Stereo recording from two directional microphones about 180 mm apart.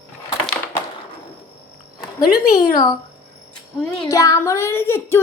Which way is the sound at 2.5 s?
25° left (ahead or behind).